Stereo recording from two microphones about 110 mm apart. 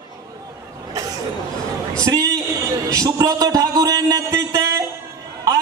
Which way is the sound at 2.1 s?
30° right (ahead or behind).